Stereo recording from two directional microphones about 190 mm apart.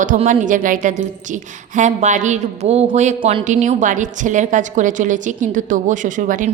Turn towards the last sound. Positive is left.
turn(degrees=-45)  # may be behind; listen again after turning